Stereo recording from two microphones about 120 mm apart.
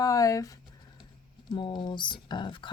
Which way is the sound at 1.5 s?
40° left (ahead or behind).